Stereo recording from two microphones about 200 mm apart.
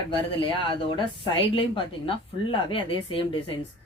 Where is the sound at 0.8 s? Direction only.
25° left (ahead or behind).